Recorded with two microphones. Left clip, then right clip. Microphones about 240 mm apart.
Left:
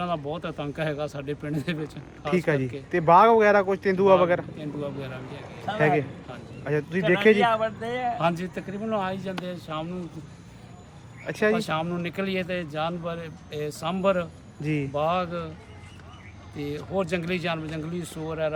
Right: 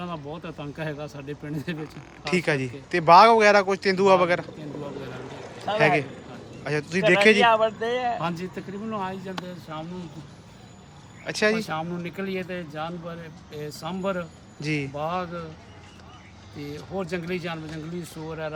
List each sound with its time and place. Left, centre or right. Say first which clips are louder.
0.0 s speech: left 5 dB; centre
5.7 s speech: right 2 dB; centre
7.3 s speech: right 4 dB; right
8.2 s speech: left 4 dB; centre
11.3 s speech: even; centre
16.6 s speech: left 4 dB; centre